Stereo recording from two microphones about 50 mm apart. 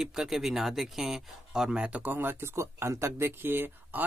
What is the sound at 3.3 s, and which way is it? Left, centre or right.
Speech, right.